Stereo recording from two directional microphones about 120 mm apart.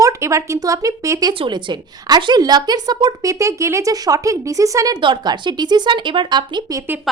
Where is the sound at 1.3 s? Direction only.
40° right (ahead or behind).